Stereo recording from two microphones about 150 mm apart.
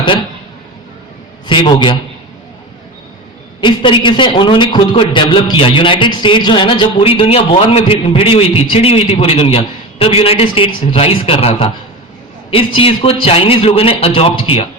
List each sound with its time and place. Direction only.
1.5 s a man's voice: 30° left (ahead or behind)
3.6 s a man's voice: 35° left (ahead or behind)